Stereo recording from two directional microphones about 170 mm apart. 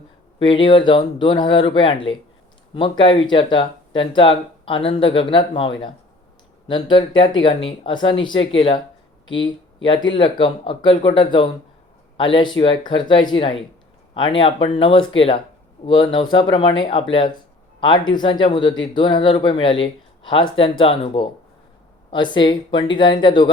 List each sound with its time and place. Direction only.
0.3 s speech: 30° left (ahead or behind)